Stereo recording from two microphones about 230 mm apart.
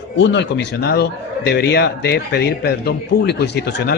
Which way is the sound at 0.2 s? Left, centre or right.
Left.